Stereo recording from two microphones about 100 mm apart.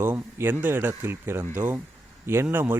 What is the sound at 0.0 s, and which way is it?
A man's voice, 25° right (ahead or behind).